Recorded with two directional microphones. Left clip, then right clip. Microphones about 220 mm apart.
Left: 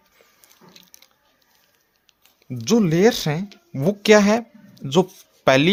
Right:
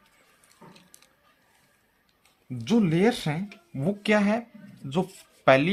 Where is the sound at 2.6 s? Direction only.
50° left (ahead or behind).